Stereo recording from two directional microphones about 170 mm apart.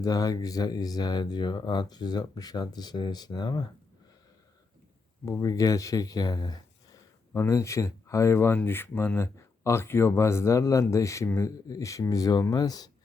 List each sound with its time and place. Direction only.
0.0 s speech: 20° left (ahead or behind)
5.2 s speech: 20° left (ahead or behind)